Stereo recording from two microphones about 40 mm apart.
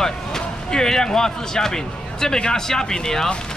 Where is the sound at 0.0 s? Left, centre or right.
Centre.